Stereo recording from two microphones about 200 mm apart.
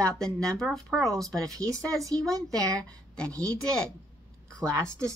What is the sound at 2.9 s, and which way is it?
Speech, 5° left (ahead or behind).